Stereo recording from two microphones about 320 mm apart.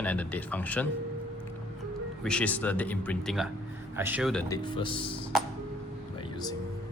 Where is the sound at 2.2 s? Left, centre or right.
Centre.